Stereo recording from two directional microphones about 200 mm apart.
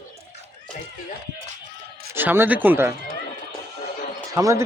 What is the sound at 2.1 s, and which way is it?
Speech, 10° right (ahead or behind).